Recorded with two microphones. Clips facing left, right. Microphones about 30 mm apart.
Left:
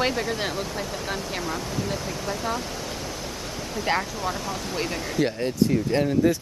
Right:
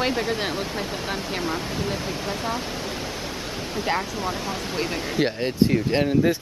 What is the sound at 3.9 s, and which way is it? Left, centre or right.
Speech, centre.